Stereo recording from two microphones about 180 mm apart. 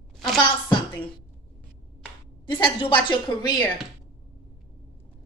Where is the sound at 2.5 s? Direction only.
30° left (ahead or behind).